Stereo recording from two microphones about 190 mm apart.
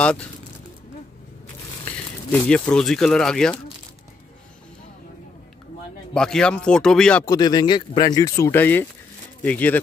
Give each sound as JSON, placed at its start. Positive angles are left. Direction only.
{"t": 0.0, "sound": "speech", "side_deg": 5}
{"t": 2.4, "sound": "speech", "side_deg": 5}
{"t": 6.1, "sound": "speech", "side_deg": 5}
{"t": 7.2, "sound": "speech", "side_deg": 20}